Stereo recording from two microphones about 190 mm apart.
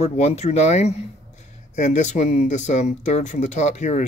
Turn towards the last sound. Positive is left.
turn(degrees=40)  # may be behind; listen again after turning